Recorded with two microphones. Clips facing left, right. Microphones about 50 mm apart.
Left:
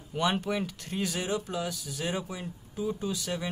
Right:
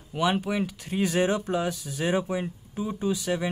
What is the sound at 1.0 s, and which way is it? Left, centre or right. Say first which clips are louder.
Speech: right 8 dB; right.